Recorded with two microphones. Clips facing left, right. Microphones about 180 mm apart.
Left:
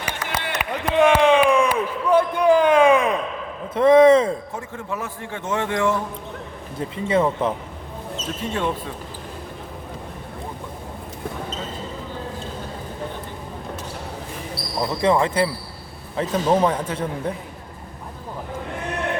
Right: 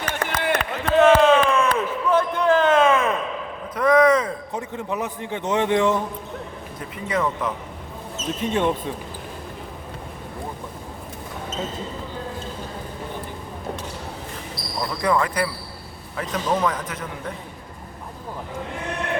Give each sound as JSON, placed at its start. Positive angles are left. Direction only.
{"t": 0.2, "sound": "run", "side_deg": -50}
{"t": 0.6, "sound": "a sound", "side_deg": 10}
{"t": 3.8, "sound": "a man's voice", "side_deg": 25}
{"t": 4.5, "sound": "a man's voice", "side_deg": -20}
{"t": 6.7, "sound": "a man's voice", "side_deg": 30}
{"t": 8.4, "sound": "a man's voice", "side_deg": -20}
{"t": 14.8, "sound": "a man's voice", "side_deg": 25}